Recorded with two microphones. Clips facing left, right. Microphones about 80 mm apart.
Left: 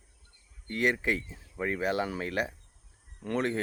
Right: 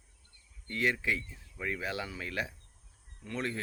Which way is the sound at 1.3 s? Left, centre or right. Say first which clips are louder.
Left 5 dB; left.